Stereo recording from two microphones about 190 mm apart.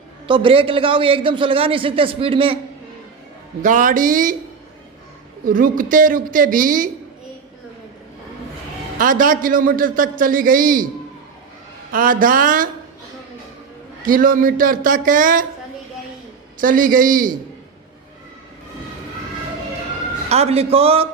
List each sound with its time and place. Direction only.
0.3 s a man's voice: 25° right (ahead or behind)
3.6 s a man's voice: 45° right (ahead or behind)
5.5 s a man's voice: 45° right (ahead or behind)
9.0 s a man's voice: 45° right (ahead or behind)
11.9 s a man's voice: 45° right (ahead or behind)
14.0 s a man's voice: 45° right (ahead or behind)
16.6 s a man's voice: 45° right (ahead or behind)
20.3 s a man's voice: 35° right (ahead or behind)